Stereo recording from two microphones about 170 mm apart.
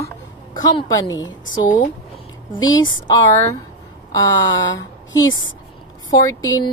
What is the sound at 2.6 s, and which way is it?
A woman's voice, 25° left (ahead or behind).